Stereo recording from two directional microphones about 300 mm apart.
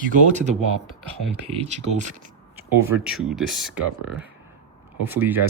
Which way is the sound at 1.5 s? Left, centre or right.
Right.